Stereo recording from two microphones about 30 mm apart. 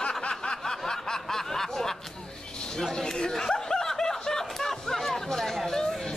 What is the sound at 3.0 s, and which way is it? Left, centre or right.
Snicker, left.